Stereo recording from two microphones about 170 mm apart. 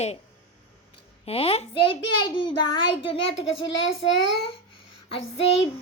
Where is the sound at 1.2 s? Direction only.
35° left (ahead or behind).